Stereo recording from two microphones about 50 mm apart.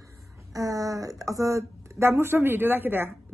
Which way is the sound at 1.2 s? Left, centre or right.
Right.